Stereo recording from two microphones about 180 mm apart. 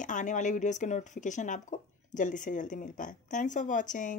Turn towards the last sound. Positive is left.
turn(degrees=45)  # may be behind; listen again after turning